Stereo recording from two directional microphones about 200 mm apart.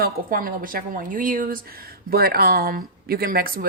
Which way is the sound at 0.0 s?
45° right (ahead or behind).